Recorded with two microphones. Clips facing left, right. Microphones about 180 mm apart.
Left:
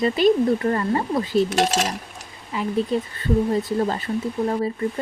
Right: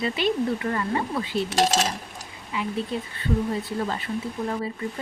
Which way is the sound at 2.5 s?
40° left (ahead or behind).